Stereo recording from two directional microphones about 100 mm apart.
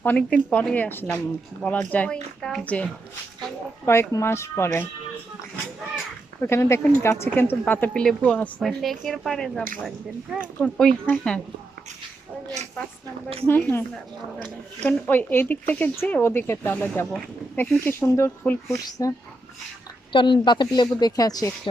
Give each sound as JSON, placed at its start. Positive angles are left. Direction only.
{"t": 0.0, "sound": "speech", "side_deg": 15}
{"t": 3.8, "sound": "speech", "side_deg": 25}
{"t": 6.4, "sound": "speech", "side_deg": 25}
{"t": 8.6, "sound": "speech", "side_deg": 0}
{"t": 13.5, "sound": "speech", "side_deg": 25}
{"t": 18.9, "sound": "speech", "side_deg": 35}
{"t": 20.1, "sound": "a woman's voice", "side_deg": 55}